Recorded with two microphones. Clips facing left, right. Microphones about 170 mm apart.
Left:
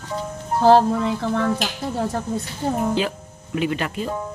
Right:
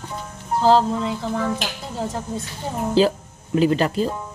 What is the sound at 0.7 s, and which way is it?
Speech, 60° left (ahead or behind).